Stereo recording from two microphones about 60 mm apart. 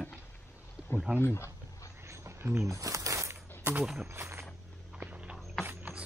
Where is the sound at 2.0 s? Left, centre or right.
Right.